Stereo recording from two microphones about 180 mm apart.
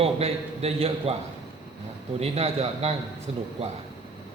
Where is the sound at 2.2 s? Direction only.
35° right (ahead or behind).